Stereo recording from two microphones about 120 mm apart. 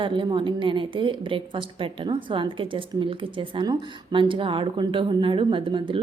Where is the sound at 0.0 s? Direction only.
40° right (ahead or behind).